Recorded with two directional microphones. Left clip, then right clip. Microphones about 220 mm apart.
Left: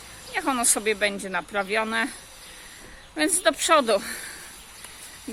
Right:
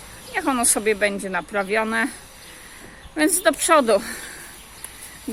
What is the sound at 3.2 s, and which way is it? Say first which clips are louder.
Speech: right 3 dB; centre (ahead or behind).